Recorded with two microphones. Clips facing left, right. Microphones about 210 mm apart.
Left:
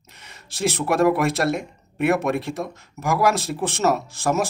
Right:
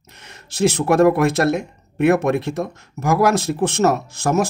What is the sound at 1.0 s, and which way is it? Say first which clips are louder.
Speech: right 2 dB; 50° right (ahead or behind).